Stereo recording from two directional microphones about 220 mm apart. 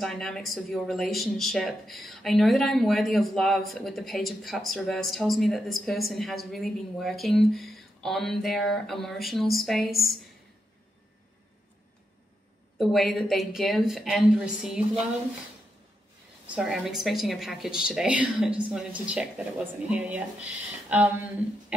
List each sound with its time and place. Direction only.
0.0 s speech: centre (ahead or behind)
12.7 s speech: centre (ahead or behind)
16.5 s speech: centre (ahead or behind)